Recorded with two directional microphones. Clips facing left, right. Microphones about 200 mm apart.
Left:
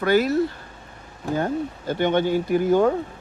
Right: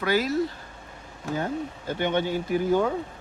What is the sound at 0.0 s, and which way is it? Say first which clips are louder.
Speech: left 5 dB; 55° left (ahead or behind).